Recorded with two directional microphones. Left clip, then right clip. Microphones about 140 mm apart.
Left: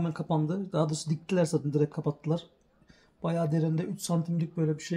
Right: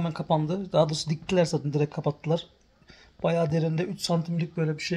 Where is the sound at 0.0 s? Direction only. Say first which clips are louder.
Right 5 dB; 25° right (ahead or behind).